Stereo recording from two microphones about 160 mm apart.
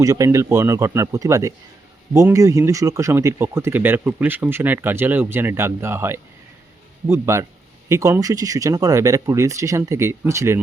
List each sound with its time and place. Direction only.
0.0 s speech: 20° right (ahead or behind)